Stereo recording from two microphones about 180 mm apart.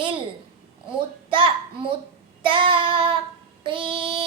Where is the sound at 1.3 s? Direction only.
30° right (ahead or behind).